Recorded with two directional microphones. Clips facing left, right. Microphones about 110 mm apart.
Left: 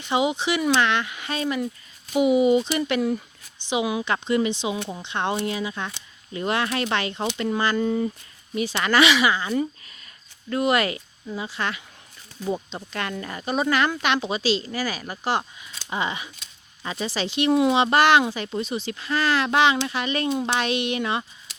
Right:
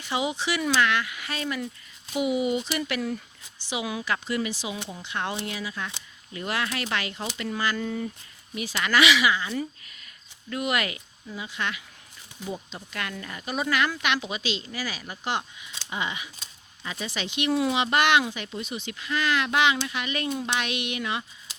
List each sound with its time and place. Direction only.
0.0 s a woman's voice: 20° left (ahead or behind); by 15.2 s 50° left (ahead or behind)
15.2 s speech: 40° left (ahead or behind)